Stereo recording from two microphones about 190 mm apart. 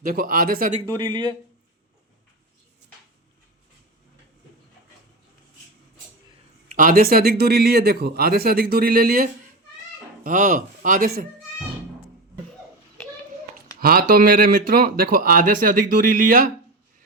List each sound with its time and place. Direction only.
0.0 s speech: 50° right (ahead or behind)
0.9 s speech: 25° right (ahead or behind)
6.7 s speech: 45° right (ahead or behind)
13.7 s speech: 50° right (ahead or behind)